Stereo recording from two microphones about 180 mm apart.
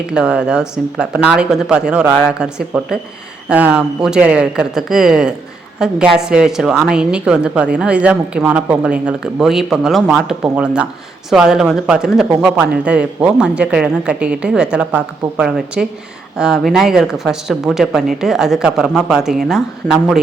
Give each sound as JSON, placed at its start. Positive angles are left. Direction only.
{"t": 0.1, "sound": "a man's voice", "side_deg": -5}